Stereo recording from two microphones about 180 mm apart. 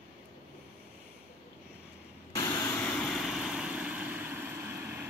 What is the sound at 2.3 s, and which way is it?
Vehicle, 15° left (ahead or behind).